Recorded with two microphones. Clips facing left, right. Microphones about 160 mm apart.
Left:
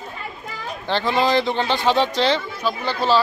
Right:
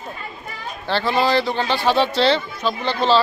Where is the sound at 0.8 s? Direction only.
15° left (ahead or behind).